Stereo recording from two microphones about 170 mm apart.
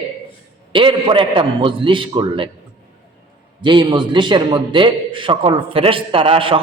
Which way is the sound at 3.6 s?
30° right (ahead or behind).